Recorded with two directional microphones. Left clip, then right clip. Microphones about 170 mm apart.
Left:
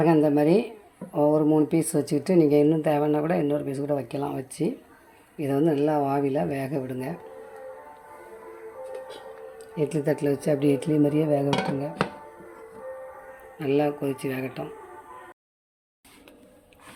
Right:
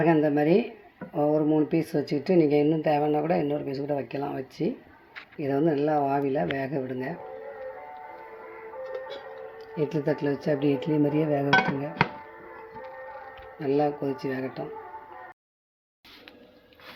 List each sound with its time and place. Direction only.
0.0 s speech: 15° left (ahead or behind)
9.6 s speech: 15° left (ahead or behind)
13.6 s speech: 10° left (ahead or behind)